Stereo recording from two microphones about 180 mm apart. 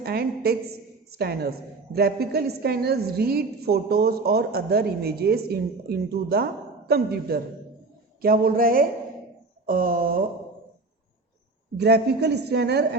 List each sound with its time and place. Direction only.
0.0 s a woman's voice: 60° right (ahead or behind)
11.8 s a woman's voice: 70° right (ahead or behind)